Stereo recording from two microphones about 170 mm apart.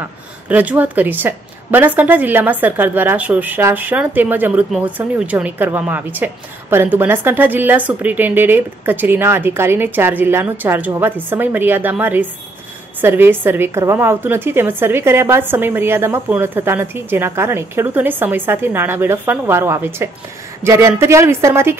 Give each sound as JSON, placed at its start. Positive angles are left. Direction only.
{"t": 0.0, "sound": "a woman's voice", "side_deg": -10}